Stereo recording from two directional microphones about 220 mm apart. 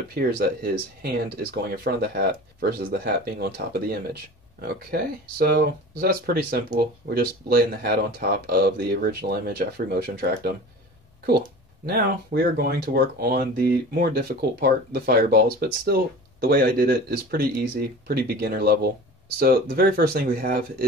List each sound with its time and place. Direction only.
1.0 s speech: 45° right (ahead or behind)